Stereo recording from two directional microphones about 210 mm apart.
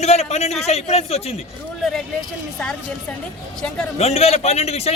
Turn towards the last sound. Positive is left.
turn(degrees=30)  # may be behind; listen again after turning